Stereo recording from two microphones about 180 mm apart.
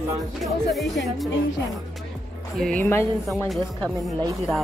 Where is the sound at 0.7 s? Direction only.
Centre (ahead or behind).